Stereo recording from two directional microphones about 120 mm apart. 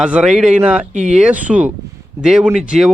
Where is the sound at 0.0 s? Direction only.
10° right (ahead or behind).